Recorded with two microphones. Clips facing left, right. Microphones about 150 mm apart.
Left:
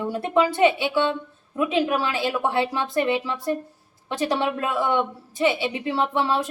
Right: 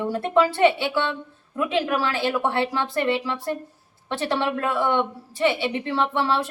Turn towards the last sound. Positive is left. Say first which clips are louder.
# even
turn(degrees=15)  # may be behind; listen again after turning